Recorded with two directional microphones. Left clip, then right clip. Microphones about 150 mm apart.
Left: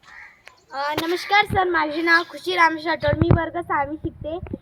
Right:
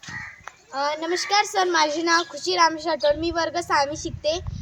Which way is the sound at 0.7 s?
15° left (ahead or behind).